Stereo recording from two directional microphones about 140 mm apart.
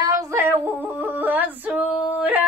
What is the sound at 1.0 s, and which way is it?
Yodeling, 15° right (ahead or behind).